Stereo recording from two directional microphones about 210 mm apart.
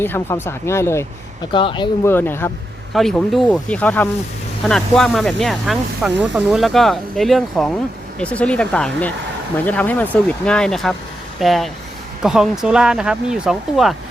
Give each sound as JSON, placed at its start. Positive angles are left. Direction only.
{"t": 0.0, "sound": "speech", "side_deg": 10}
{"t": 1.5, "sound": "speech", "side_deg": 25}
{"t": 2.0, "sound": "speech", "side_deg": 10}